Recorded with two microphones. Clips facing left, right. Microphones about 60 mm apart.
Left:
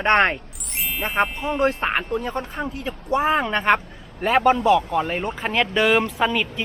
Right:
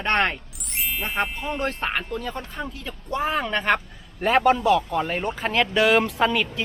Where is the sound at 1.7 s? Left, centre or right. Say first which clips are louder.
Left 4 dB; left.